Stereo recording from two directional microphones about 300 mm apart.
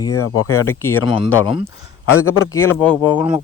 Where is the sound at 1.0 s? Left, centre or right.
Centre.